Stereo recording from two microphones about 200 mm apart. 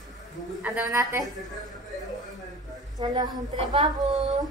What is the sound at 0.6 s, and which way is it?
Speech, 5° right (ahead or behind).